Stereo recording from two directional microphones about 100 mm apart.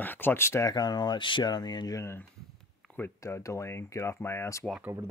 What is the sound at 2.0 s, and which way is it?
Speech, 25° left (ahead or behind).